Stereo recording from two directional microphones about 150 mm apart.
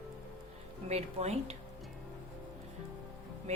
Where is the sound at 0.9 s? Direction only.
45° right (ahead or behind).